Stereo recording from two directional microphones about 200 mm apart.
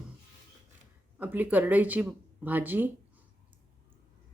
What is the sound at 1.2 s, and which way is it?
Speech, 10° right (ahead or behind).